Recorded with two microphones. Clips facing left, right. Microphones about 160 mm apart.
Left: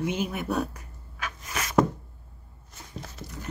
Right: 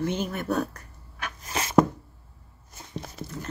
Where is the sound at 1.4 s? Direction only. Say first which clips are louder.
Right 4 dB; 30° right (ahead or behind).